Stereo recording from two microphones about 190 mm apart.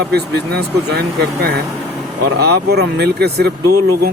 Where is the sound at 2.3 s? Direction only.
60° right (ahead or behind).